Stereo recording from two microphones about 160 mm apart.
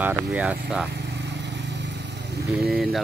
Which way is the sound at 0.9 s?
90° right.